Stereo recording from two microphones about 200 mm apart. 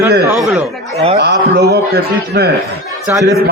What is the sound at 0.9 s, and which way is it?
Speech, 30° right (ahead or behind).